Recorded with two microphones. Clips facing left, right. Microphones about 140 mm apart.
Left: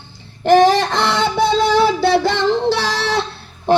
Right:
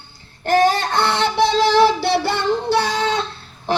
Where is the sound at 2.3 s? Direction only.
90° left.